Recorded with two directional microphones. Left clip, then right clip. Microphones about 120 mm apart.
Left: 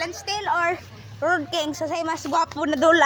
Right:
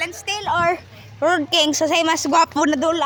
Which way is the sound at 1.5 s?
90° right.